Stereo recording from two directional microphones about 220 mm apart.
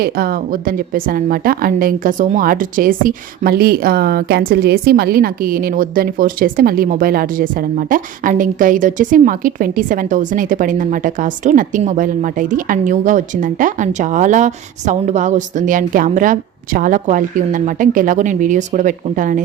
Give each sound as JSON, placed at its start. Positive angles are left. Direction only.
{"t": 0.0, "sound": "a woman's voice", "side_deg": -40}